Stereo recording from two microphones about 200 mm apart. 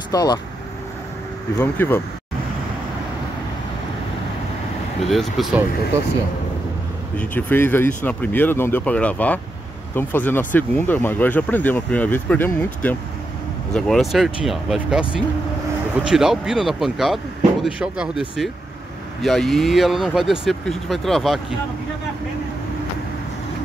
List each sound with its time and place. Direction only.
0.1 s speech: 20° left (ahead or behind)
1.6 s speech: 10° left (ahead or behind)
5.0 s speech: centre (ahead or behind)
7.2 s speech: 10° left (ahead or behind)
19.2 s speech: centre (ahead or behind)